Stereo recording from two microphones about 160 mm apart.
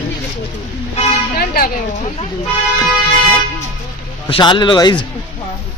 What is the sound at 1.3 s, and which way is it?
Speech, 70° left (ahead or behind).